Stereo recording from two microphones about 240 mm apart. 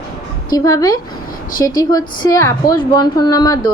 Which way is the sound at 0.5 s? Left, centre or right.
Centre.